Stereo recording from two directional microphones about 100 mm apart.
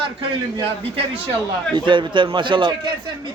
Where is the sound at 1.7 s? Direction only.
55° right (ahead or behind).